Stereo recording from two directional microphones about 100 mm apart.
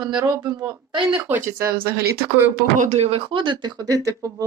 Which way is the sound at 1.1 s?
20° right (ahead or behind).